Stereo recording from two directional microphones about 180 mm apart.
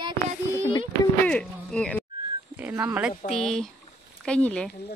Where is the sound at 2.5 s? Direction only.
10° right (ahead or behind).